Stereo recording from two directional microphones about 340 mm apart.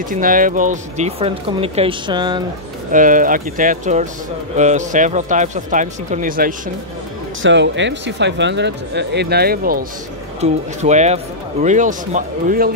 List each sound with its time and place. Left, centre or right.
0.1 s speech: right
2.9 s speech: right